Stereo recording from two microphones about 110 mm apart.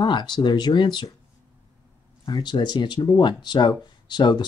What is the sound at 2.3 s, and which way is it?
Speech, 40° left (ahead or behind).